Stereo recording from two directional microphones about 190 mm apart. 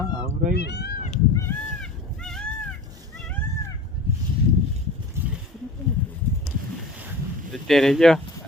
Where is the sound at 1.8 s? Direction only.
5° left (ahead or behind).